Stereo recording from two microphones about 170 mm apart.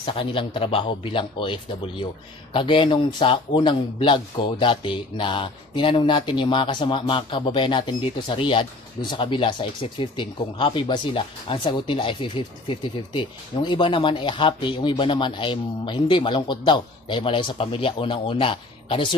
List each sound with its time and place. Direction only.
0.0 s speech: 30° left (ahead or behind)